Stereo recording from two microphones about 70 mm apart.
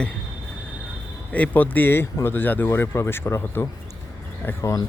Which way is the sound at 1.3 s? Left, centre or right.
Left.